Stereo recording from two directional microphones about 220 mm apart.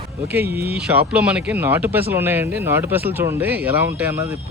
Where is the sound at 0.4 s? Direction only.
45° right (ahead or behind).